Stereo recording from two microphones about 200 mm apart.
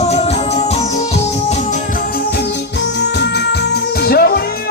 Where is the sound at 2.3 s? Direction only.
60° left (ahead or behind).